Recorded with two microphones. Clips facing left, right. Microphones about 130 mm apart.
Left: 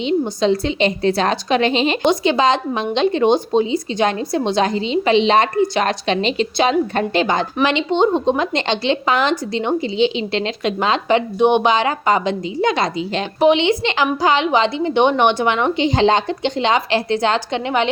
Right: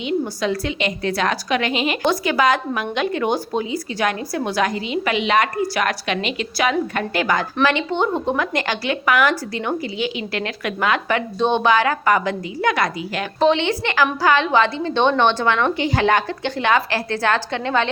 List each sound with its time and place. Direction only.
0.0 s a woman's voice: 25° left (ahead or behind)